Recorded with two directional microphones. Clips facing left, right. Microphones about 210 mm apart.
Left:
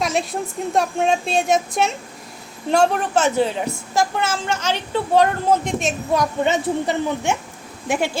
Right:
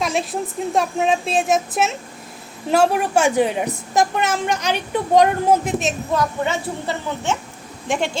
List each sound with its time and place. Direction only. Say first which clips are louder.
0.0 s a woman's voice: even; centre (ahead or behind)
6.1 s a woman's voice: left 4 dB; 20° left (ahead or behind)
7.9 s a woman's voice: left 1 dB; 5° left (ahead or behind)